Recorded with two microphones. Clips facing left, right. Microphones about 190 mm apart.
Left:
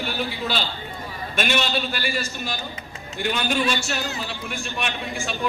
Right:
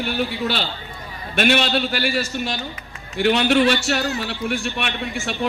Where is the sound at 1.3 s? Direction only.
60° right (ahead or behind).